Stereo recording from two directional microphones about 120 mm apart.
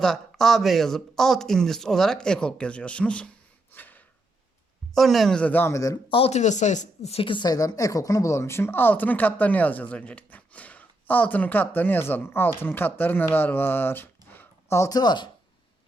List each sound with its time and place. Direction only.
0.0 s speech: 5° left (ahead or behind)
3.7 s a sound: 15° left (ahead or behind)
4.9 s speech: centre (ahead or behind); by 6.0 s 25° left (ahead or behind)
6.1 s speech: 50° left (ahead or behind)